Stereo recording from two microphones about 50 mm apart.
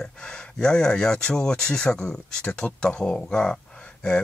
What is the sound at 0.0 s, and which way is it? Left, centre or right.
Speech, centre.